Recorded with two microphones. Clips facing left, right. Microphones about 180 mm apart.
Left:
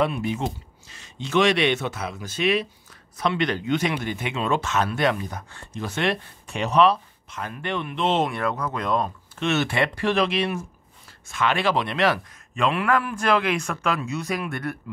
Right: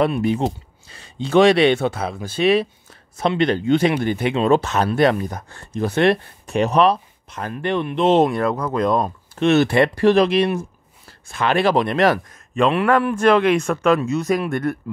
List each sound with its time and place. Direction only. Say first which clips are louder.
0.2 s speech: right 7 dB; 35° right (ahead or behind)
13.2 s speech: right 7 dB; 45° right (ahead or behind)